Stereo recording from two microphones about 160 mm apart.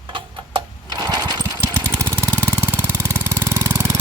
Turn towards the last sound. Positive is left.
turn(degrees=-15)  # may be behind; listen again after turning